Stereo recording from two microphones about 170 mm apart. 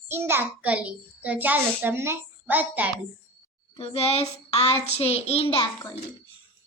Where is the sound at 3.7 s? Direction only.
35° left (ahead or behind).